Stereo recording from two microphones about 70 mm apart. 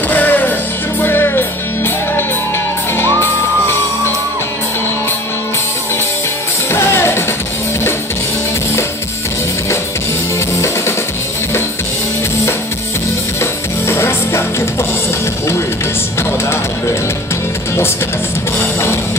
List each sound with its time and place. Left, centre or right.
0.1 s music: left
3.0 s music: left
6.7 s music: left
13.4 s music: left
16.2 s music: left